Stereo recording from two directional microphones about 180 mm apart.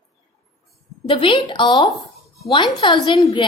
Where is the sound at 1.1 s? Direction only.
30° left (ahead or behind).